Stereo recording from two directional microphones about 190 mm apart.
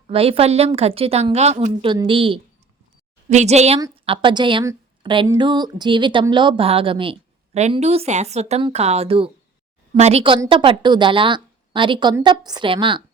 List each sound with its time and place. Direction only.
0.1 s a woman's voice: 30° right (ahead or behind)